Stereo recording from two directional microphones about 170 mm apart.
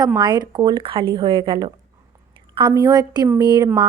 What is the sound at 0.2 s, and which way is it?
A woman's voice, 25° right (ahead or behind).